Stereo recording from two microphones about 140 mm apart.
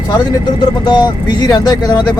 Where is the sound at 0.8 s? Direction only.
30° left (ahead or behind).